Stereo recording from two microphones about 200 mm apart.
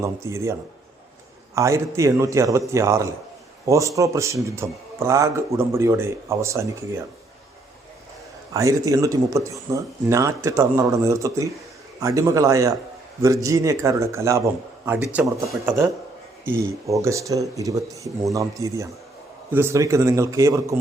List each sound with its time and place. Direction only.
0.0 s a man's voice: 15° right (ahead or behind)
1.5 s a man's voice: 15° right (ahead or behind)
8.5 s a man's voice: 15° right (ahead or behind)